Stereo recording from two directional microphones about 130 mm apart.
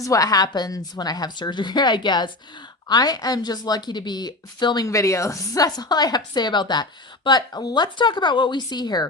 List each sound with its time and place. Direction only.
0.0 s a woman's voice: 25° left (ahead or behind)